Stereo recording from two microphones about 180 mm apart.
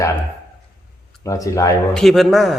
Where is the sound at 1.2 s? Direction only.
15° left (ahead or behind).